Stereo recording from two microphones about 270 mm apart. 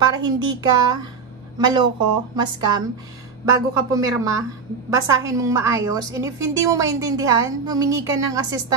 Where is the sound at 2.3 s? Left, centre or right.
Centre.